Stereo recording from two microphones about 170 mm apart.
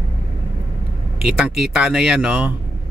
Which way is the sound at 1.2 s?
5° right (ahead or behind).